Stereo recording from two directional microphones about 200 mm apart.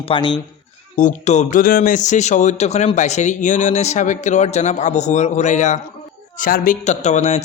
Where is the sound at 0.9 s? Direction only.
35° left (ahead or behind).